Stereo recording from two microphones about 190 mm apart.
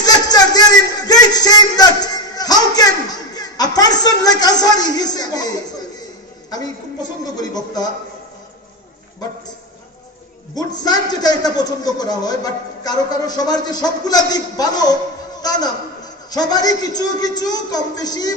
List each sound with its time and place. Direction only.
0.0 s a sound: 20° left (ahead or behind)
6.5 s a man's voice: 20° left (ahead or behind)
10.8 s a man's voice: 20° left (ahead or behind)
16.3 s a man's voice: 20° left (ahead or behind)